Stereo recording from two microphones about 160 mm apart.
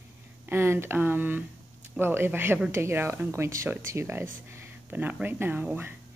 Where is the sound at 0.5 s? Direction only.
15° right (ahead or behind).